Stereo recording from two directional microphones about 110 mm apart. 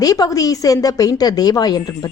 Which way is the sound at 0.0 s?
35° left (ahead or behind).